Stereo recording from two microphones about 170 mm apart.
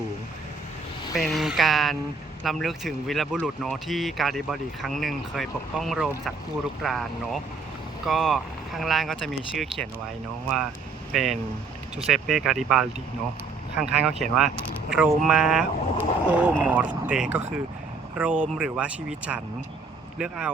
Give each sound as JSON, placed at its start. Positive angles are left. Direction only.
{"t": 1.1, "sound": "speech", "side_deg": 0}
{"t": 8.0, "sound": "speech", "side_deg": 0}
{"t": 11.1, "sound": "speech", "side_deg": 0}
{"t": 13.9, "sound": "speech", "side_deg": -5}